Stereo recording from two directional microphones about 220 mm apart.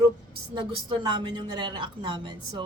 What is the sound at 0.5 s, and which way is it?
Speech, 20° right (ahead or behind).